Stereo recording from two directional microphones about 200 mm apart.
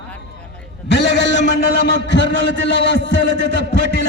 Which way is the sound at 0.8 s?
60° left (ahead or behind).